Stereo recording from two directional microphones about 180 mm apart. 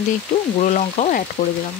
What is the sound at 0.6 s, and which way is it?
Speech, 40° left (ahead or behind).